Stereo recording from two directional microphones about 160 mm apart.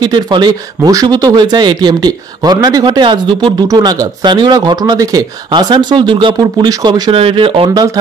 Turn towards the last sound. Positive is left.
turn(degrees=-30)  # may be behind; listen again after turning